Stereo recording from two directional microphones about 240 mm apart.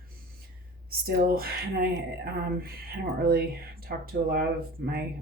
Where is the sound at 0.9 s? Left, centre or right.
Right.